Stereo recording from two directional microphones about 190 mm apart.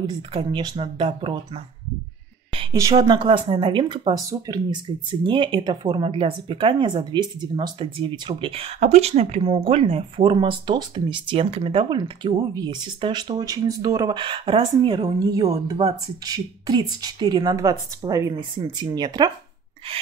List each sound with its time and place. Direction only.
0.0 s speech: 30° right (ahead or behind)